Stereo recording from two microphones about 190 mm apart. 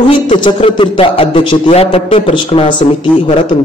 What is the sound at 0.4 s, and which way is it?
A man's voice, 25° left (ahead or behind).